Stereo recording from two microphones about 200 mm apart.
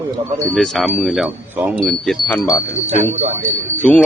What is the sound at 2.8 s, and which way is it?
Speech, 35° right (ahead or behind).